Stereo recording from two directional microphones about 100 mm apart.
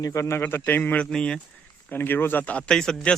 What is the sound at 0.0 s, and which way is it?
Speech, 30° left (ahead or behind).